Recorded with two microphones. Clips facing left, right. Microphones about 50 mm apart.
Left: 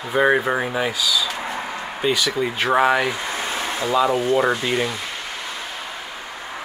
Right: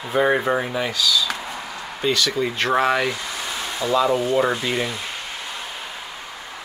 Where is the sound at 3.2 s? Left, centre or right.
Left.